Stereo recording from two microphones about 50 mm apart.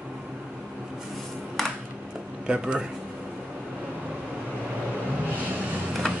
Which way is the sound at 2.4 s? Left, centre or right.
Centre.